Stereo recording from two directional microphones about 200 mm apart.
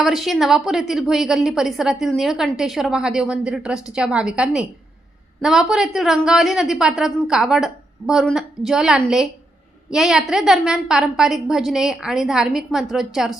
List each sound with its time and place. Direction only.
0.0 s a woman's voice: centre (ahead or behind)